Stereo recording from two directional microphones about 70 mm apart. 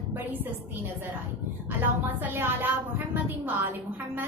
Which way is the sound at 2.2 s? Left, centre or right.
Right.